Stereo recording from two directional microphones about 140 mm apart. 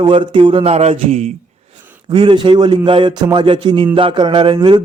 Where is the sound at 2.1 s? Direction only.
35° right (ahead or behind).